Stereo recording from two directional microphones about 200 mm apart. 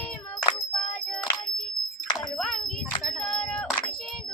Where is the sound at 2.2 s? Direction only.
Centre (ahead or behind).